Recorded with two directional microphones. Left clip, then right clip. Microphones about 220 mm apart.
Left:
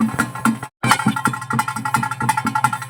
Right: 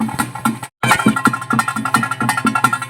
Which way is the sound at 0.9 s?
40° right (ahead or behind).